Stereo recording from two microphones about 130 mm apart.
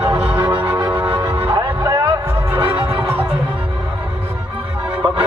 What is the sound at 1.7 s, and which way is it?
Music, 15° right (ahead or behind).